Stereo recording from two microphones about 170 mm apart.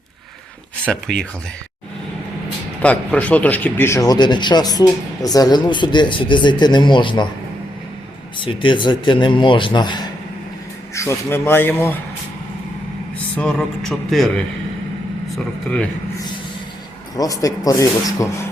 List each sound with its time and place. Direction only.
0.9 s speech: 5° left (ahead or behind)
2.8 s speech: 10° left (ahead or behind); by 7.3 s 30° left (ahead or behind)
8.4 s speech: 30° left (ahead or behind)
10.9 s speech: 15° left (ahead or behind)
13.3 s speech: 5° left (ahead or behind)
17.2 s speech: 20° left (ahead or behind)